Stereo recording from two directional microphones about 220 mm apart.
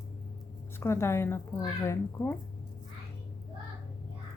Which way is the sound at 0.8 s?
10° left (ahead or behind).